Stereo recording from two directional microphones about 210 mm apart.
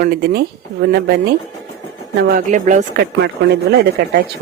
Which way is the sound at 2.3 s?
35° right (ahead or behind).